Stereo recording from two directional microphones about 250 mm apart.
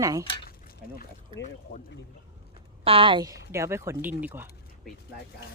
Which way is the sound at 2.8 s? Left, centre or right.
Right.